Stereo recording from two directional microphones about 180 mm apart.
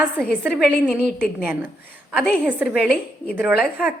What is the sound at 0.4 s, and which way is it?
A woman's voice, centre (ahead or behind).